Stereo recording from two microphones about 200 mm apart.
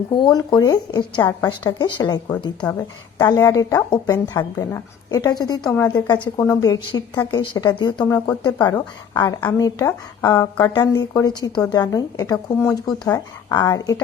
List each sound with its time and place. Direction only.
0.1 s a woman's voice: 20° left (ahead or behind)
5.9 s a woman's voice: 20° left (ahead or behind)
9.4 s a woman's voice: 10° left (ahead or behind)